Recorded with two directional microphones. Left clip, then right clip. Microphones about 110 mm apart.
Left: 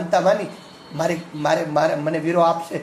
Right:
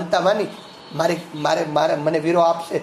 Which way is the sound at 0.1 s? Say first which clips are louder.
Even; 10° right (ahead or behind).